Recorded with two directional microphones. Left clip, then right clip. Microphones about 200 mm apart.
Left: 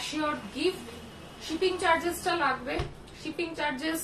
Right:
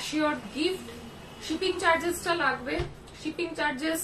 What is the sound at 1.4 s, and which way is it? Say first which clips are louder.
Speech: right 1 dB; 15° right (ahead or behind).